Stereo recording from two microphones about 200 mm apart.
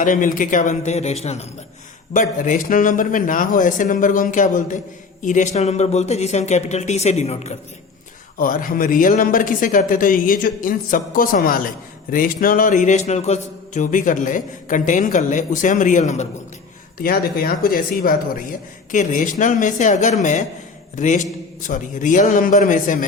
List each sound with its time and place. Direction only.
0.0 s speech: 40° left (ahead or behind)
17.0 s speech: 50° left (ahead or behind)